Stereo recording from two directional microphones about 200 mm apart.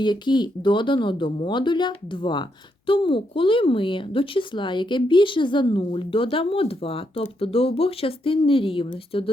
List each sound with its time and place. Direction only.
0.0 s speech: 20° left (ahead or behind)